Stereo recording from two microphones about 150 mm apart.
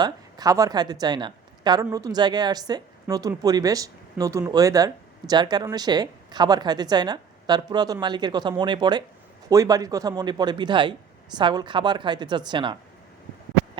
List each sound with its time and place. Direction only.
0.0 s a woman's voice: 25° right (ahead or behind)